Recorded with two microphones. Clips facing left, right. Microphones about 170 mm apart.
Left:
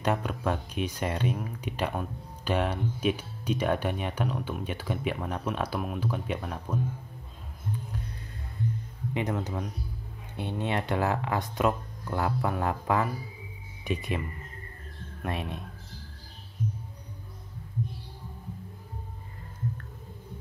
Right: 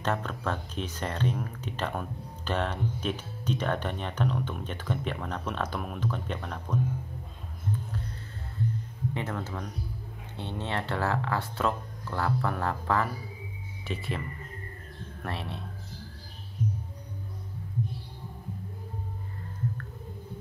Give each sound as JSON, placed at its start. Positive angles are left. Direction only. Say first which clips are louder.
{"t": 0.0, "sound": "speech", "louder": "left 2 dB", "side_deg": 10}
{"t": 9.1, "sound": "speech", "louder": "left 6 dB", "side_deg": 15}
{"t": 15.2, "sound": "speech", "louder": "left 3 dB", "side_deg": 15}